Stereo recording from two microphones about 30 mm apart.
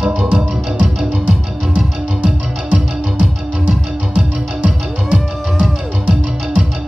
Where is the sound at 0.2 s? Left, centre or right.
Right.